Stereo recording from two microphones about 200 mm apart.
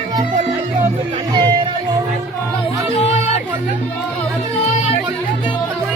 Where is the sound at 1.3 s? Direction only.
20° right (ahead or behind).